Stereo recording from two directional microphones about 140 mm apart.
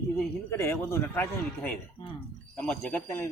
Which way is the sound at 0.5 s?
20° left (ahead or behind).